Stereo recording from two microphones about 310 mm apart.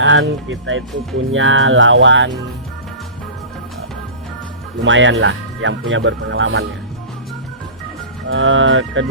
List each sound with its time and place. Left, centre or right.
0.0 s speech: right
4.8 s speech: right
8.3 s speech: right